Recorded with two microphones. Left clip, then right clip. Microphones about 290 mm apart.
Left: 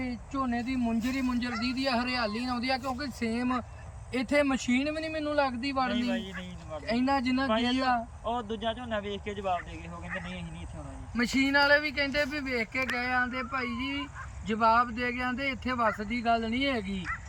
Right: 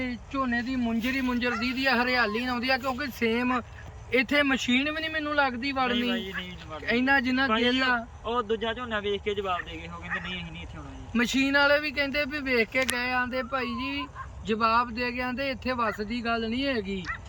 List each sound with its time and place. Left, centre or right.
0.0 s speech: centre
6.8 s speech: centre
7.4 s speech: centre
11.1 s speech: centre